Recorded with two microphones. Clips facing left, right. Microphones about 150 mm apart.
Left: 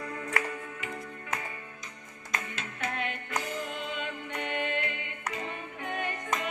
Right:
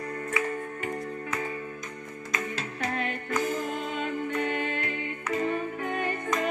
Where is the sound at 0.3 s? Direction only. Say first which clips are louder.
Right 4 dB; 50° right (ahead or behind).